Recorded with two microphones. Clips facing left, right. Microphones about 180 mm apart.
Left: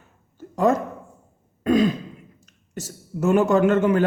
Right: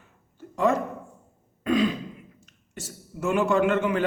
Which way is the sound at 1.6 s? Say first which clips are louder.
Left 4 dB; 40° left (ahead or behind).